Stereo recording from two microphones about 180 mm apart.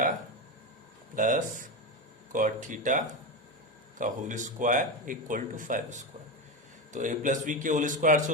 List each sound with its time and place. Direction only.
1.1 s speech: 45° right (ahead or behind)